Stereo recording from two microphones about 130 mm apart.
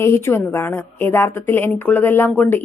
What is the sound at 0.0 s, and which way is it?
A woman's voice, 20° left (ahead or behind).